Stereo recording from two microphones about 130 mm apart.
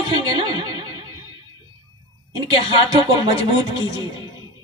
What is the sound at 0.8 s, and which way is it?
Music, 30° right (ahead or behind).